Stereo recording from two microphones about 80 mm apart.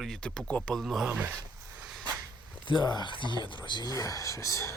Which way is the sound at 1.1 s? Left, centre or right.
Centre.